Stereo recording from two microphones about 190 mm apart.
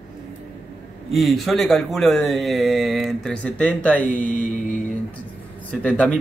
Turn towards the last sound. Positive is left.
turn(degrees=5)  # may be behind; listen again after turning